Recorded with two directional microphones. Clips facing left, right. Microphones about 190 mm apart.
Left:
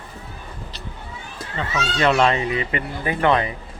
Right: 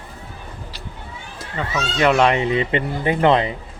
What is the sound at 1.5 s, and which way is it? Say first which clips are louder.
Speech: right 2 dB; 10° right (ahead or behind).